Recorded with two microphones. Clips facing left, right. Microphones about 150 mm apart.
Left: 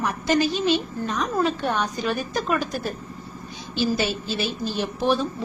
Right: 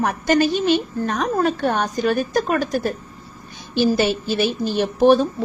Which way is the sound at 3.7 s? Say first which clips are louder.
Right 6 dB; 60° right (ahead or behind).